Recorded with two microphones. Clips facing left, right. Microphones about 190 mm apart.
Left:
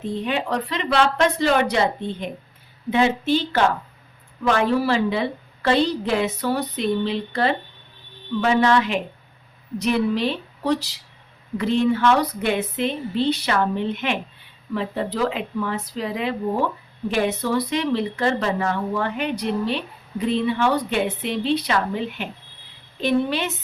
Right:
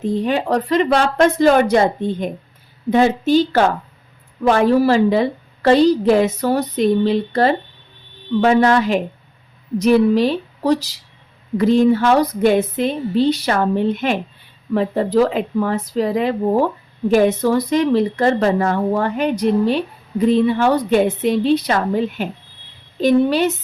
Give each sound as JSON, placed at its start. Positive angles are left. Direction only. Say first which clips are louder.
{"t": 0.0, "sound": "a woman's voice", "louder": "right 6 dB", "side_deg": -40}